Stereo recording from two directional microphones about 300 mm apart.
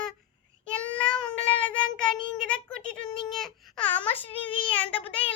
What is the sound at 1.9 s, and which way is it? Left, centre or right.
Child singing, centre.